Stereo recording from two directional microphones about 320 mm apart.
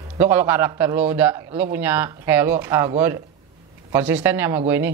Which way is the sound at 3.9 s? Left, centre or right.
Centre.